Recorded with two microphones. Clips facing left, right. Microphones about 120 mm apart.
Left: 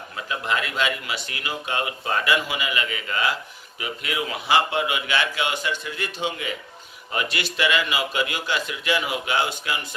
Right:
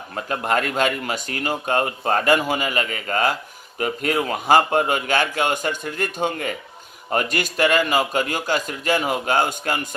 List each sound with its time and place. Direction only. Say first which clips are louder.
0.2 s speech: right 4 dB; 45° right (ahead or behind)